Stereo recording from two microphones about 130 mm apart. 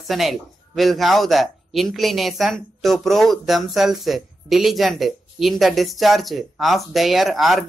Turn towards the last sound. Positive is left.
turn(degrees=0)  # may be behind; listen again after turning